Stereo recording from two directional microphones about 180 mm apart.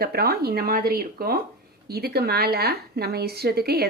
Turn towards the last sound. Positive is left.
turn(degrees=-60)  # may be behind; listen again after turning